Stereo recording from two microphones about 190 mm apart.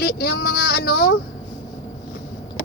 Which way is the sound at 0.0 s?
55° left (ahead or behind).